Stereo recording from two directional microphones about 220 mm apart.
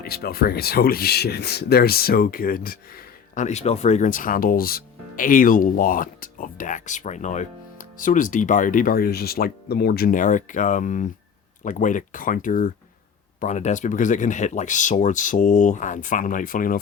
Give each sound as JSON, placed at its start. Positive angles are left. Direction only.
{"t": 0.0, "sound": "speech", "side_deg": 45}